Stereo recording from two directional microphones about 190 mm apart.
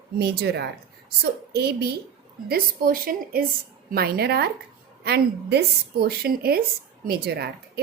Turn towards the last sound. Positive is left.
turn(degrees=-55)  # may be behind; listen again after turning